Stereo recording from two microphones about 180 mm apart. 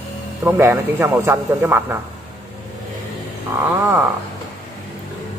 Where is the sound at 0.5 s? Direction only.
10° right (ahead or behind).